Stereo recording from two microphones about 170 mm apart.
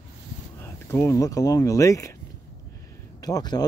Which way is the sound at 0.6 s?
15° left (ahead or behind).